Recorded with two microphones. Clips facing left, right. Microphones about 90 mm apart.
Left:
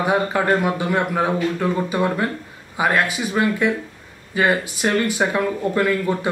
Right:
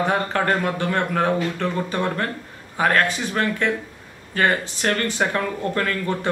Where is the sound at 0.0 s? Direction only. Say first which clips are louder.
Left 2 dB; 10° left (ahead or behind).